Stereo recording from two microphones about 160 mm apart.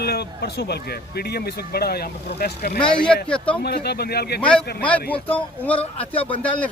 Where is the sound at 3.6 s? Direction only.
85° left.